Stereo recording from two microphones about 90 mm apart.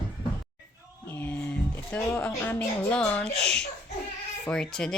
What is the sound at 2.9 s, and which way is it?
Speech, 10° left (ahead or behind).